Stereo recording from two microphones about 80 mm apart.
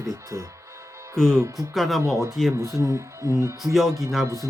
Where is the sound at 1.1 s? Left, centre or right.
Centre.